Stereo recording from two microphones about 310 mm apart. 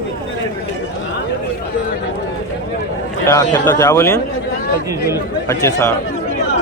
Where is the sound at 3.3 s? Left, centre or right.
Centre.